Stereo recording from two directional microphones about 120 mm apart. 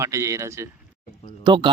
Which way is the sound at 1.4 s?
40° right (ahead or behind).